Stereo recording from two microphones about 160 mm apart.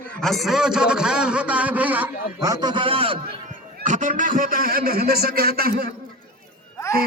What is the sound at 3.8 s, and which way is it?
A man's voice, 50° right (ahead or behind).